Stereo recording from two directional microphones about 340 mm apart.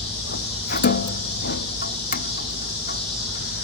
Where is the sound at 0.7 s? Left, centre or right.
Left.